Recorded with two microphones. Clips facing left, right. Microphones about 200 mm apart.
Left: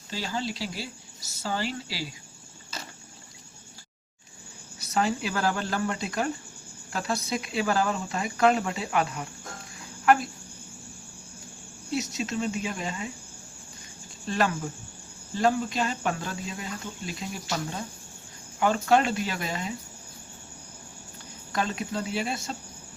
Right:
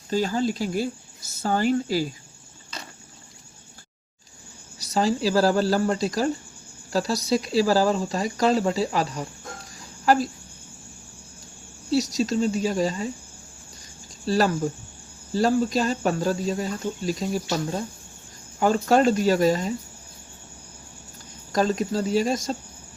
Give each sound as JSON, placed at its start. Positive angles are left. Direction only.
{"t": 0.1, "sound": "speech", "side_deg": -45}
{"t": 4.9, "sound": "speech", "side_deg": -35}
{"t": 11.9, "sound": "speech", "side_deg": -35}
{"t": 14.3, "sound": "speech", "side_deg": -35}
{"t": 21.5, "sound": "speech", "side_deg": -40}